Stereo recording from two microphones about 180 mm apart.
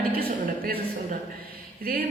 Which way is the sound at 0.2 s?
60° right (ahead or behind).